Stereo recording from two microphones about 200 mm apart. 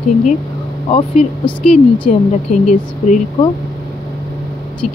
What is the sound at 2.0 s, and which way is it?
Speech, 40° left (ahead or behind).